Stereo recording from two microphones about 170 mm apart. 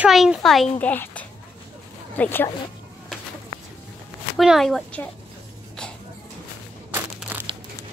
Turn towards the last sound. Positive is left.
turn(degrees=-10)  # may be behind; listen again after turning